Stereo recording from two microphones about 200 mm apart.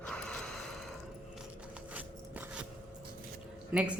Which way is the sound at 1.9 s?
10° right (ahead or behind).